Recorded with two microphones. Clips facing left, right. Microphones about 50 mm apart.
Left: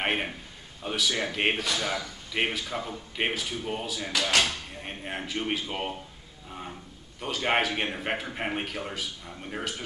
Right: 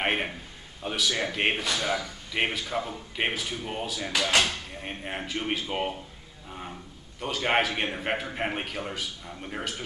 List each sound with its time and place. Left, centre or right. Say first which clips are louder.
0.0 s a man's voice: right 1 dB; centre
4.1 s speech: right 1 dB; centre
4.8 s speech: right 1 dB; centre
7.2 s speech: right 1 dB; centre